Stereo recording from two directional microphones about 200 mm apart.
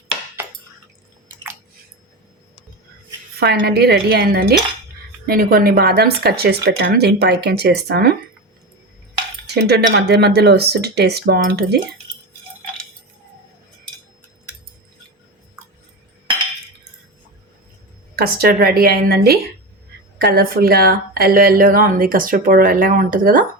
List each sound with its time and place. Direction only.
3.4 s a woman's voice: 55° right (ahead or behind)
9.6 s speech: 55° right (ahead or behind)
18.2 s a woman's voice: 50° right (ahead or behind)